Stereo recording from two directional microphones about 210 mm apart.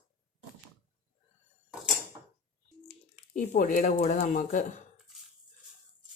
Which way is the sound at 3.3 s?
40° left (ahead or behind).